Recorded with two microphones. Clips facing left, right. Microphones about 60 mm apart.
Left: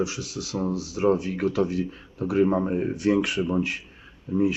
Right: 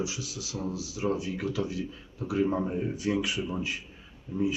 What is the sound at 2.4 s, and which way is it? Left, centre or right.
Speech, left.